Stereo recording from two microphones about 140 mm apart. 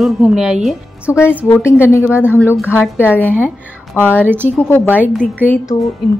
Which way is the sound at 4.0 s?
15° left (ahead or behind).